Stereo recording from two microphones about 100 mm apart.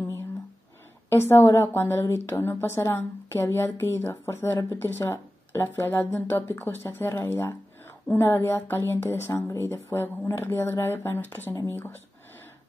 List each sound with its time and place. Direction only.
1.1 s a woman's voice: 25° left (ahead or behind)